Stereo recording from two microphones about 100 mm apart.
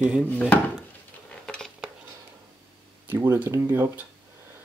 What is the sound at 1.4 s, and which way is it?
Dishes, 5° left (ahead or behind).